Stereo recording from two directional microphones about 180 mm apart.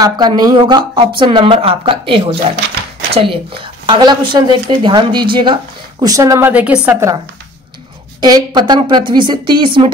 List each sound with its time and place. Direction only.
0.0 s a woman's voice: 20° right (ahead or behind)
8.2 s a woman's voice: 25° right (ahead or behind)